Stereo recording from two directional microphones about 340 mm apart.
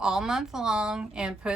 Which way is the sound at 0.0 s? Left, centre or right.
Centre.